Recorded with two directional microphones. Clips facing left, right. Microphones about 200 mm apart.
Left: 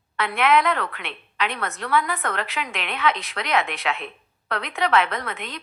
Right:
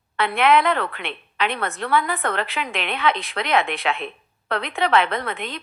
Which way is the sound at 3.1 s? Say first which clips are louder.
Right 2 dB; 55° right (ahead or behind).